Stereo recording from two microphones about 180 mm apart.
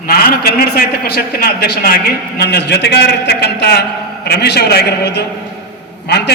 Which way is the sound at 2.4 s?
70° left (ahead or behind).